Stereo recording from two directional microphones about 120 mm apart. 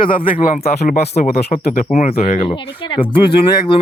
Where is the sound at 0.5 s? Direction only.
80° left.